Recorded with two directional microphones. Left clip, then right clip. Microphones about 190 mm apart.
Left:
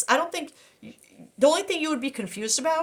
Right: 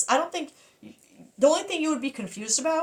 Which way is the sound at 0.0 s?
45° left (ahead or behind).